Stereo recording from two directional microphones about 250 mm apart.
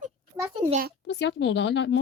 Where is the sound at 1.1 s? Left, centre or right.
Left.